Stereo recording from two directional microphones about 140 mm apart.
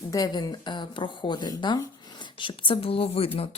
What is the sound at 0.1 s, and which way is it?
A woman's voice, 30° left (ahead or behind).